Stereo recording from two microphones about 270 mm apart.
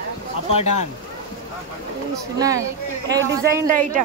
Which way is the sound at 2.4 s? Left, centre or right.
Centre.